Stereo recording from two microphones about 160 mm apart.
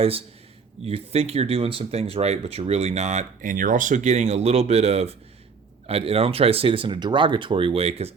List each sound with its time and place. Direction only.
0.9 s speech: 40° right (ahead or behind)